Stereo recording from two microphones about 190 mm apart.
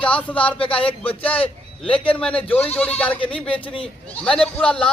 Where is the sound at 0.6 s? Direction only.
30° left (ahead or behind).